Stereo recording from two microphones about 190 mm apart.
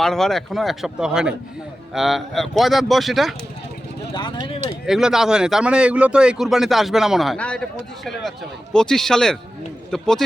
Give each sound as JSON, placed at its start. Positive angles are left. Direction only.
{"t": 0.0, "sound": "speech", "side_deg": 0}
{"t": 4.1, "sound": "speech", "side_deg": 25}
{"t": 4.9, "sound": "speech", "side_deg": 0}
{"t": 8.7, "sound": "speech", "side_deg": 5}